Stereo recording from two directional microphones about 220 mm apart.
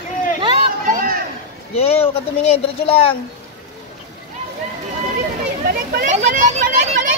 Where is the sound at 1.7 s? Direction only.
25° left (ahead or behind).